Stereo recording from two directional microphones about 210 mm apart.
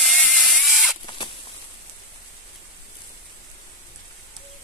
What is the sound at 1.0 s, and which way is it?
Rodents, 20° left (ahead or behind).